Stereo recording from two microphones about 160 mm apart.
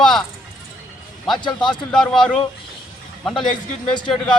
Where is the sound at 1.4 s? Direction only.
30° left (ahead or behind).